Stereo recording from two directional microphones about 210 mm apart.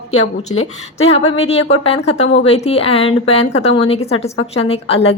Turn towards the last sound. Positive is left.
turn(degrees=30)  # may be behind; listen again after turning